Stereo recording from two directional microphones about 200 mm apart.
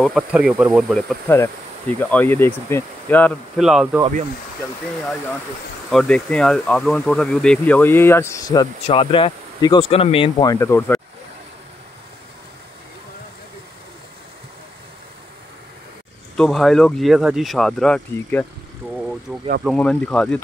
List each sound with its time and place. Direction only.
0.0 s speech: 5° right (ahead or behind)
1.3 s speech: 10° left (ahead or behind); by 4.0 s 5° right (ahead or behind)
5.9 s speech: 5° left (ahead or behind)
16.3 s speech: centre (ahead or behind)
18.9 s vehicle: centre (ahead or behind)
19.6 s speech: 5° left (ahead or behind)